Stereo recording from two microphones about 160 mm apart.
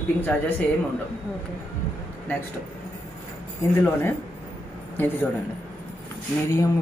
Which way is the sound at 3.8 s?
10° left (ahead or behind).